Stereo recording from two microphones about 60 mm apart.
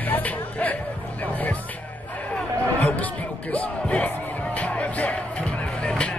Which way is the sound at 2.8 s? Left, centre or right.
Left.